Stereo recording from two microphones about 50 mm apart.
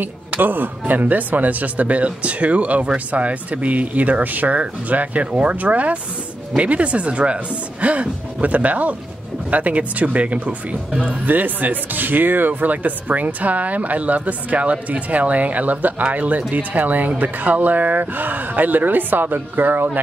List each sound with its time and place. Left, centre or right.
0.0 s speech: right